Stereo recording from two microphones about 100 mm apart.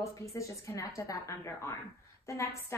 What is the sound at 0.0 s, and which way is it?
A woman's voice, 30° left (ahead or behind).